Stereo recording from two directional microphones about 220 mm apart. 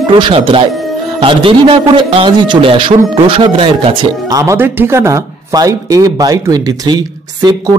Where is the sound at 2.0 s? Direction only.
20° right (ahead or behind).